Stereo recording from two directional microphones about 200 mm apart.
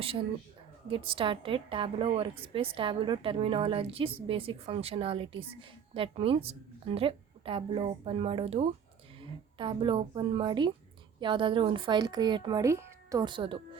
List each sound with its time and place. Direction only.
0.9 s a woman's voice: 25° right (ahead or behind)